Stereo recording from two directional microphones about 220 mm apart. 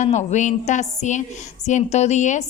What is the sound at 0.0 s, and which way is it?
A woman's voice, 30° left (ahead or behind).